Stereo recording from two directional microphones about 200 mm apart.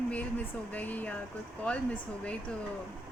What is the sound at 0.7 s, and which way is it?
Speech, 10° left (ahead or behind).